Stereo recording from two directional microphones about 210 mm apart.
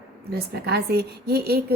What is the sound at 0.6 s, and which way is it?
A woman's voice, 50° right (ahead or behind).